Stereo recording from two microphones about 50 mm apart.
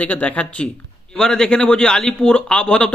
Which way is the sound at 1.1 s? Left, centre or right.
Centre.